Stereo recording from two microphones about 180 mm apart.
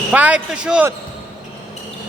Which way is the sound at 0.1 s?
5° right (ahead or behind).